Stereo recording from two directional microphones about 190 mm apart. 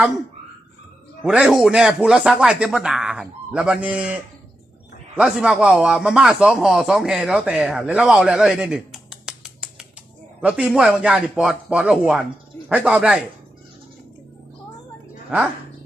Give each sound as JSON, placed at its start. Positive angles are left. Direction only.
{"t": 1.2, "sound": "speech", "side_deg": -5}